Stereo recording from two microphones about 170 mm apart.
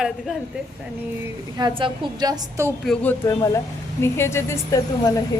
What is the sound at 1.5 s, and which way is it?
A woman's voice, 25° right (ahead or behind).